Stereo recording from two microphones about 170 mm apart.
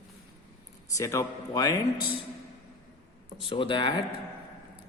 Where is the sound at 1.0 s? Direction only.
20° left (ahead or behind).